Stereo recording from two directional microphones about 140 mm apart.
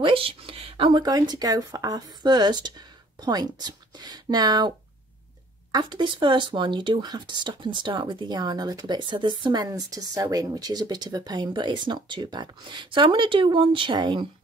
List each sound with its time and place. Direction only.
0.0 s speech: 40° right (ahead or behind)